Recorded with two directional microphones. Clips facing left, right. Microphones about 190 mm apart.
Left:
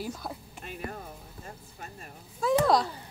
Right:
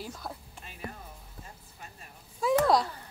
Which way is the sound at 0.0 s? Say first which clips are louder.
Left 4 dB; 5° left (ahead or behind).